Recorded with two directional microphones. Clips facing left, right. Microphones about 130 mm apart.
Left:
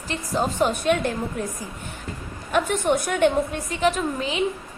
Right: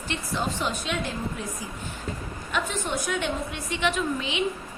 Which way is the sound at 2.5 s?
55° left (ahead or behind).